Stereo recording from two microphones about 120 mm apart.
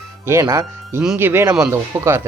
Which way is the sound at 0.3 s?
25° right (ahead or behind).